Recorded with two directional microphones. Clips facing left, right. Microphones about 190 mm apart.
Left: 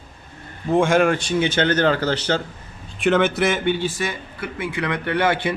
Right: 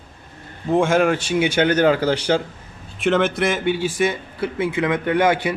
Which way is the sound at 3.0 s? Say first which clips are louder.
Even; centre (ahead or behind).